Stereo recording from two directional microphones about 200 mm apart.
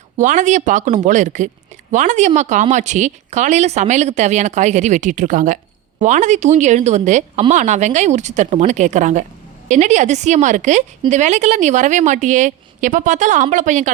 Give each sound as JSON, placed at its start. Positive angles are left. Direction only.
{"t": 0.2, "sound": "speech", "side_deg": -40}